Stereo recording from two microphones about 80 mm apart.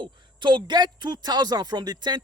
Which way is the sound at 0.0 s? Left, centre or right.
Right.